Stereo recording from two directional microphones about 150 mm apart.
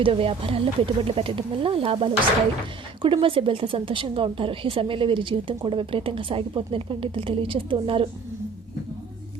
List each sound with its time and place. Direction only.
0.0 s a woman's voice: 40° right (ahead or behind)